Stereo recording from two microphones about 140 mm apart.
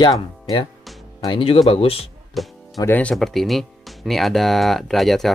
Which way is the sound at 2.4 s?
Centre (ahead or behind).